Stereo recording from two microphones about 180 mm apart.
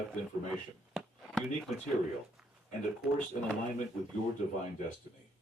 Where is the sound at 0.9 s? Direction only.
Centre (ahead or behind).